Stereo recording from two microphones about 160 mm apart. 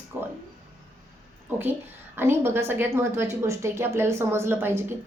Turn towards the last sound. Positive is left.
turn(degrees=-15)  # may be behind; listen again after turning